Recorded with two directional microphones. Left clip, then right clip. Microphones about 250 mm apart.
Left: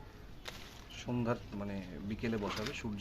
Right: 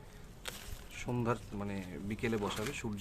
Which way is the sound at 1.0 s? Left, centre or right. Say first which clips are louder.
Right 1 dB; centre.